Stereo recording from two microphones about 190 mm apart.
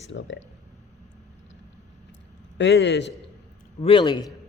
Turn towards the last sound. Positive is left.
turn(degrees=25)  # may be behind; listen again after turning